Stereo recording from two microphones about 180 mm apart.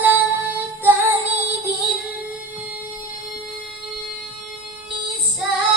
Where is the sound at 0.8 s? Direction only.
10° right (ahead or behind).